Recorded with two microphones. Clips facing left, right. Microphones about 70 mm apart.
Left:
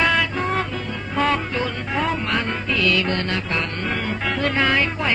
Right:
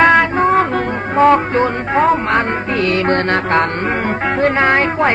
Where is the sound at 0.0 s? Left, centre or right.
Right.